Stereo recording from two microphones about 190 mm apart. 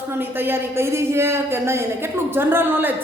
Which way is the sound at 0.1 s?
10° right (ahead or behind).